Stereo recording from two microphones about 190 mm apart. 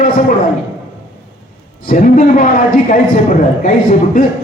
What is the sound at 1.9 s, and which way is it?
A man's voice, 45° left (ahead or behind).